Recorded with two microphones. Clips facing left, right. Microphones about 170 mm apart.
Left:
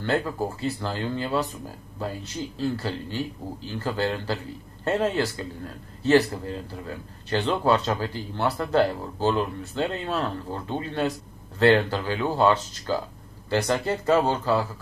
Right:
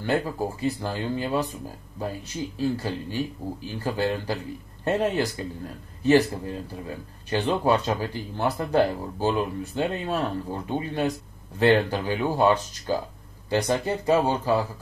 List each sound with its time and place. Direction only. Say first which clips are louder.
0.0 s speech: even; 15° right (ahead or behind)